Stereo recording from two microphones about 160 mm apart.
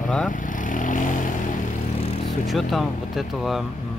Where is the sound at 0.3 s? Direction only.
55° left (ahead or behind).